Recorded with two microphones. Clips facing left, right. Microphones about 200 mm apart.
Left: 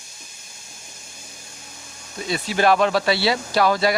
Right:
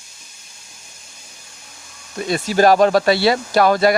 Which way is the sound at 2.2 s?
45° right (ahead or behind).